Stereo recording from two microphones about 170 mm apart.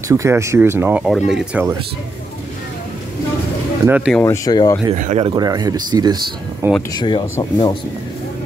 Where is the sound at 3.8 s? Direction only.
10° right (ahead or behind).